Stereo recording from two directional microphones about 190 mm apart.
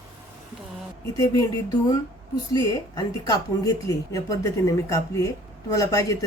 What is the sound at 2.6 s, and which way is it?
A woman's voice, 20° left (ahead or behind).